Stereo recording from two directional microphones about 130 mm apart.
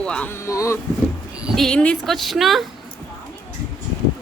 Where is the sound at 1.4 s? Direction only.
Centre (ahead or behind).